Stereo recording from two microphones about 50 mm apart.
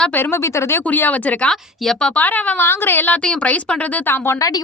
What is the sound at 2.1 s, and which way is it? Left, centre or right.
Speech, left.